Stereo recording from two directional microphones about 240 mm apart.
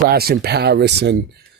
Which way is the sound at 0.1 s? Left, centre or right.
Right.